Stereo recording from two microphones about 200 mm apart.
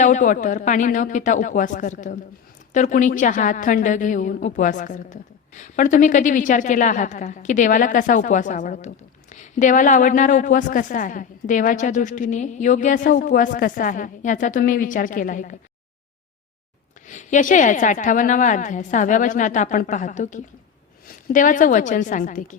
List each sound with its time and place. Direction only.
0.0 s a woman's voice: 40° left (ahead or behind)
17.1 s a woman's voice: 35° left (ahead or behind)